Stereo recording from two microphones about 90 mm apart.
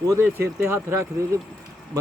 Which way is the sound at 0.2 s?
25° right (ahead or behind).